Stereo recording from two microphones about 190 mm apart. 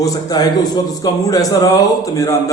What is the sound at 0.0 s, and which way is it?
A man's voice, 20° left (ahead or behind).